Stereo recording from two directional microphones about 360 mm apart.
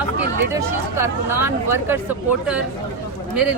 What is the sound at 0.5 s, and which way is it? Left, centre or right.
A woman's voice, centre.